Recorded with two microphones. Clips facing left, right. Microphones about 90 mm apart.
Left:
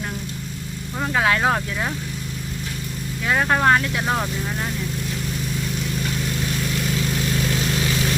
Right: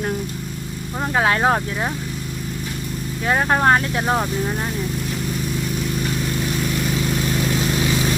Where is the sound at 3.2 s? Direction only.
30° right (ahead or behind).